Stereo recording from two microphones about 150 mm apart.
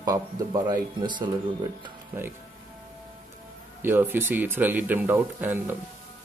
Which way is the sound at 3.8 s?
15° right (ahead or behind).